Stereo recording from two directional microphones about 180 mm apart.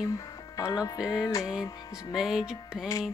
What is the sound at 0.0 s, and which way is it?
Speech, 20° left (ahead or behind).